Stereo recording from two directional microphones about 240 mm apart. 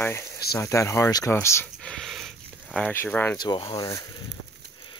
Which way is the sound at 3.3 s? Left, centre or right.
Centre.